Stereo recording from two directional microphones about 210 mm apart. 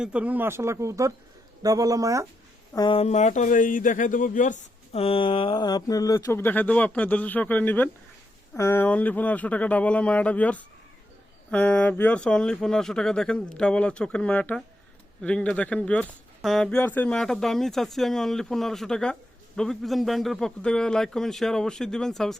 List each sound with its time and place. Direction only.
0.0 s speech: 5° right (ahead or behind)
2.7 s speech: 25° left (ahead or behind); by 22.4 s centre (ahead or behind)